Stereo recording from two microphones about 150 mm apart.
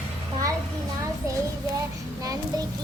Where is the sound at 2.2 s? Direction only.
25° right (ahead or behind).